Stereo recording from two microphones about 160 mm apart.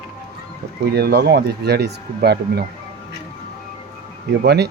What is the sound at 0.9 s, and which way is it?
Speech, 80° right.